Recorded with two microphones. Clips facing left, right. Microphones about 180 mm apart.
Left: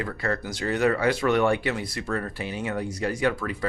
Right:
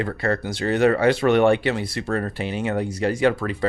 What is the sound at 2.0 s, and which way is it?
Speech, 40° right (ahead or behind).